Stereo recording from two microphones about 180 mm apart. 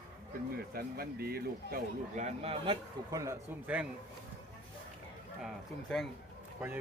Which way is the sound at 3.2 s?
10° right (ahead or behind).